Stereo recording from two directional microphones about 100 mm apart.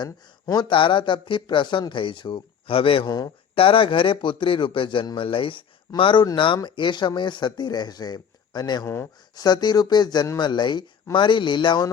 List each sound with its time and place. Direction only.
0.4 s a man's voice: 45° left (ahead or behind)